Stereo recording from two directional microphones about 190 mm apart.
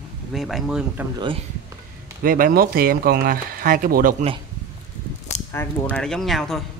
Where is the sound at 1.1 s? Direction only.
25° right (ahead or behind).